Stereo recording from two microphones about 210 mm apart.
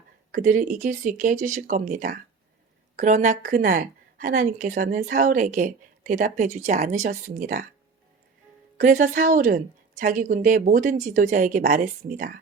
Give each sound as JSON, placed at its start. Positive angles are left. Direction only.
{"t": 0.3, "sound": "a woman's voice", "side_deg": -40}
{"t": 8.8, "sound": "a woman's voice", "side_deg": -40}